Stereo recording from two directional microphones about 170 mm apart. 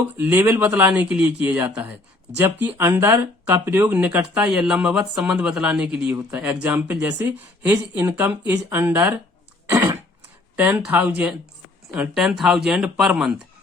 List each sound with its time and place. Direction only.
0.2 s speech: 10° right (ahead or behind)
9.6 s throat clearing: 15° right (ahead or behind)
10.6 s speech: 10° right (ahead or behind)